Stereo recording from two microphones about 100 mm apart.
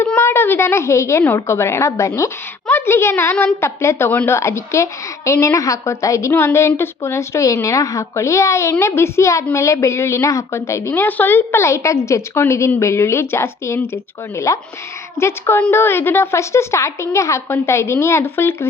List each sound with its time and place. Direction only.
0.2 s a woman's voice: 25° left (ahead or behind)